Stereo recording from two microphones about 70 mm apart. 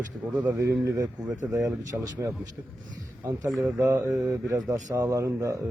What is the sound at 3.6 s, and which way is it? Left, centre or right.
Speech, right.